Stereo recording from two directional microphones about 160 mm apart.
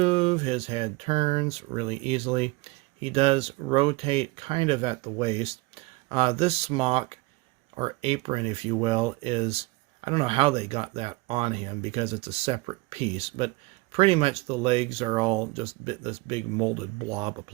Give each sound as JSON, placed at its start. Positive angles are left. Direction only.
{"t": 0.0, "sound": "speech", "side_deg": -40}